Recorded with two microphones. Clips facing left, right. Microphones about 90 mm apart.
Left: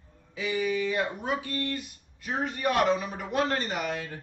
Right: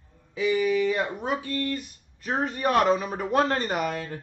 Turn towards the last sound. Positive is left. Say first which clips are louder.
# right 4 dB
turn(degrees=-45)  # may be behind; listen again after turning